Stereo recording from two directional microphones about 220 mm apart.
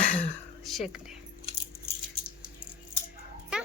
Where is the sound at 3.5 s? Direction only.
5° right (ahead or behind).